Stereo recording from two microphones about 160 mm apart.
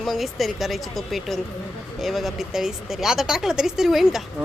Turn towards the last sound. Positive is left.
turn(degrees=0)  # may be behind; listen again after turning